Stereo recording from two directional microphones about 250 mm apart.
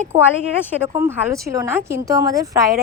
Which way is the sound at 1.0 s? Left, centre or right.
Centre.